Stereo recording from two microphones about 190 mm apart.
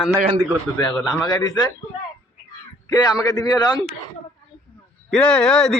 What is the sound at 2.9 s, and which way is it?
Speech, 20° left (ahead or behind).